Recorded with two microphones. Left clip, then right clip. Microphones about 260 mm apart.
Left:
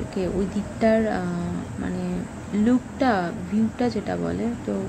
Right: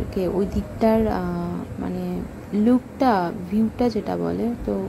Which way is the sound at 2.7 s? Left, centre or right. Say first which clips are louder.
Right 3 dB; centre.